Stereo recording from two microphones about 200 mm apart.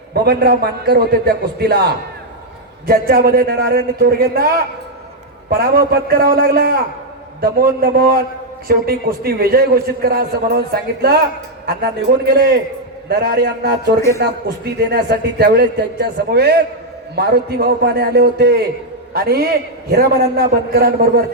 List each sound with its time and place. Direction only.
0.1 s a man's voice: 50° right (ahead or behind)
13.1 s a man's voice: 50° right (ahead or behind)